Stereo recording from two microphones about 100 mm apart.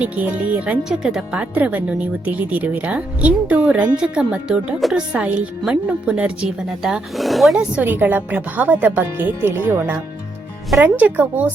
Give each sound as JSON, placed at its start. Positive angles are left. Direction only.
{"t": 0.0, "sound": "speech", "side_deg": -15}
{"t": 7.6, "sound": "speech", "side_deg": -15}